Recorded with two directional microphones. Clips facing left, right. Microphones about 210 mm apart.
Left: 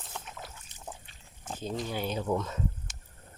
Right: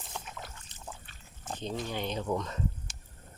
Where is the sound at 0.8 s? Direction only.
15° left (ahead or behind).